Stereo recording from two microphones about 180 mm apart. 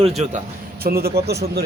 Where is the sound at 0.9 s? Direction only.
60° right (ahead or behind).